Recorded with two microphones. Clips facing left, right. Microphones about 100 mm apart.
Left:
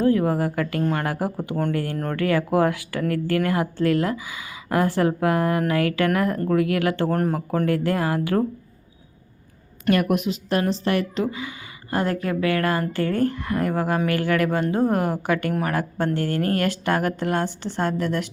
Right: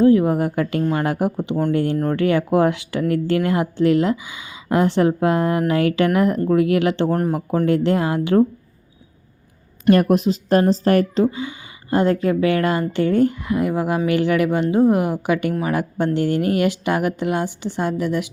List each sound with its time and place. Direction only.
0.0 s a woman's voice: 20° right (ahead or behind)
1.7 s speech: 20° right (ahead or behind)
9.9 s a woman's voice: 35° right (ahead or behind); by 18.3 s 15° right (ahead or behind)